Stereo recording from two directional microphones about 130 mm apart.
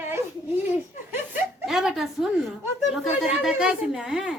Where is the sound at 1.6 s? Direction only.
Centre (ahead or behind).